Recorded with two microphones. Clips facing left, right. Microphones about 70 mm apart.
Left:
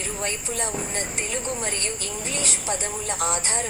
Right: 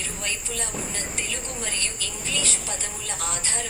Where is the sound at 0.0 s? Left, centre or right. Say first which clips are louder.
Left 3 dB; left.